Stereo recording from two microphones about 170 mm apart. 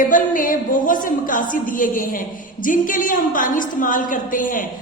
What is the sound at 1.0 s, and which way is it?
A woman's voice, 50° left (ahead or behind).